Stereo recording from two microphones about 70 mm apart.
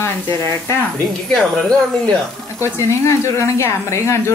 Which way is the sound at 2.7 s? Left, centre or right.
Left.